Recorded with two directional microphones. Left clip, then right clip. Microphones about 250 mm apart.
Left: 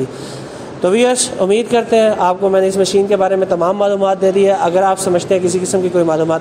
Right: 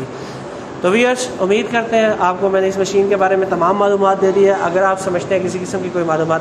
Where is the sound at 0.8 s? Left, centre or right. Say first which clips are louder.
Left 2 dB; left.